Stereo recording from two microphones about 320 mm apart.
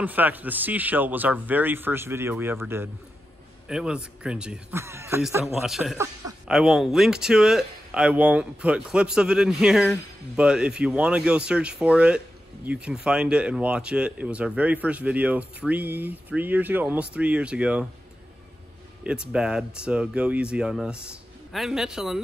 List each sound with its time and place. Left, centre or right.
0.0 s speech: centre
19.0 s speech: centre